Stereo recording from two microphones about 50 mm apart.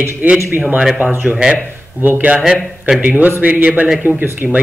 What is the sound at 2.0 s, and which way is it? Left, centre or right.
Speech, right.